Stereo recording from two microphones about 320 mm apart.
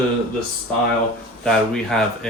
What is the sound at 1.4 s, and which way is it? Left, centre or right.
Speech, centre.